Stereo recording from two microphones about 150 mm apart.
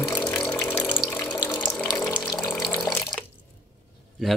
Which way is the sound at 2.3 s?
25° left (ahead or behind).